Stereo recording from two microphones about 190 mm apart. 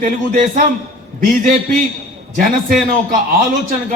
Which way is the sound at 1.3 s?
45° right (ahead or behind).